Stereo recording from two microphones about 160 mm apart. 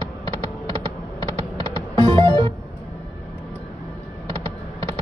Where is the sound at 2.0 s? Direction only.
35° right (ahead or behind).